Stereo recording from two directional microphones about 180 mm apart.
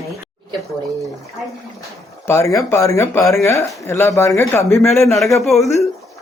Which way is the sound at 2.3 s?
15° left (ahead or behind).